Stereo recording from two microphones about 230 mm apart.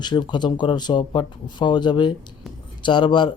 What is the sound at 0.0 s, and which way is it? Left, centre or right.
Speech, centre.